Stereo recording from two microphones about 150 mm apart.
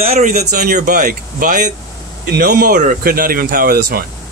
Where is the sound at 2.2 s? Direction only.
90° right.